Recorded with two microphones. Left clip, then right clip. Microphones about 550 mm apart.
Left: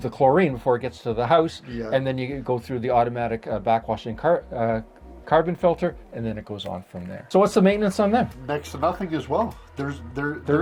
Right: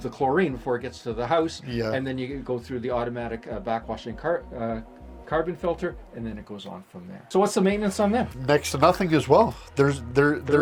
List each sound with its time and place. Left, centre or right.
0.0 s speech: left
7.3 s speech: left
8.4 s speech: right